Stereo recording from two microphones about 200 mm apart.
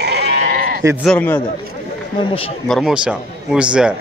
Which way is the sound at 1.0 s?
5° left (ahead or behind).